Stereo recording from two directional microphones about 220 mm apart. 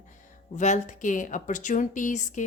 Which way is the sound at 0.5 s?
35° left (ahead or behind).